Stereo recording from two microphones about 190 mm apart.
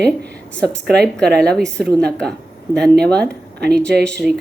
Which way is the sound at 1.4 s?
5° left (ahead or behind).